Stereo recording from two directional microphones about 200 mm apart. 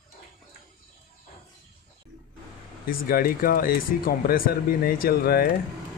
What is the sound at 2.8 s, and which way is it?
Speech, 45° left (ahead or behind).